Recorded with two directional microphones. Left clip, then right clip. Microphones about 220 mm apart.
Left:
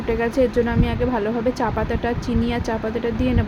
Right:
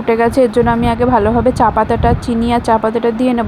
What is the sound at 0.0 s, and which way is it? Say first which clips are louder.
Speech: right 8 dB; 25° right (ahead or behind).